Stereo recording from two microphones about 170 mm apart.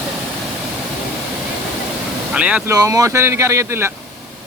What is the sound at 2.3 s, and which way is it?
Speech, 5° right (ahead or behind).